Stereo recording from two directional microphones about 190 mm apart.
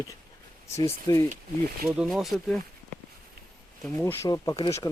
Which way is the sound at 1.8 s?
5° right (ahead or behind).